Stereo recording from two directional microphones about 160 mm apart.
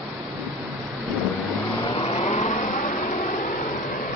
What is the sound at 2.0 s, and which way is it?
Vehicle, 45° left (ahead or behind).